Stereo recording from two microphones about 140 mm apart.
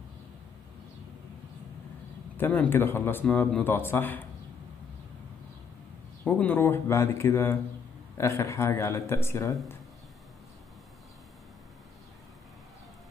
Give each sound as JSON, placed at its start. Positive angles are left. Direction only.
{"t": 2.3, "sound": "speech", "side_deg": 15}
{"t": 6.2, "sound": "speech", "side_deg": 15}